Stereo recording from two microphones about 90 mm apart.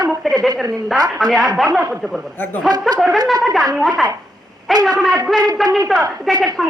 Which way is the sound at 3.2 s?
Centre (ahead or behind).